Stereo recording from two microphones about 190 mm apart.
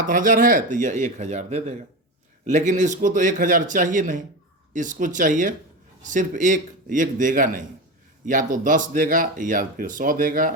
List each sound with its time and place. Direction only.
0.0 s a man's voice: 45° right (ahead or behind)